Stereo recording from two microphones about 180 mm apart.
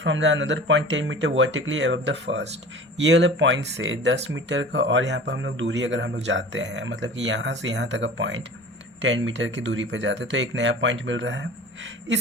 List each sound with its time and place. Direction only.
0.0 s speech: 90° right